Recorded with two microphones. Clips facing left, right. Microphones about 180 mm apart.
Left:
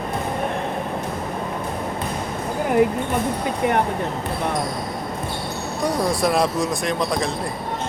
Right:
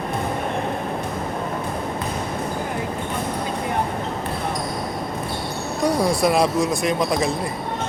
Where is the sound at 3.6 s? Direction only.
70° left (ahead or behind).